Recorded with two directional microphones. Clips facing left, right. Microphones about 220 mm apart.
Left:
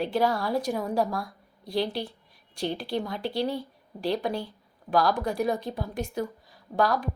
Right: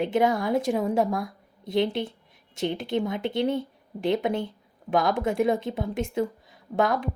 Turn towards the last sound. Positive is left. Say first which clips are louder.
# right 1 dB
turn(degrees=-25)  # may be behind; listen again after turning